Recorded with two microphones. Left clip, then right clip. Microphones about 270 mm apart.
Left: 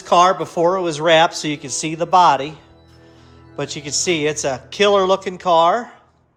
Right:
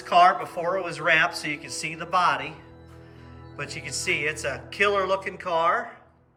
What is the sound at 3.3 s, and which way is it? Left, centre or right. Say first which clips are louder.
Speech: left 8 dB; left.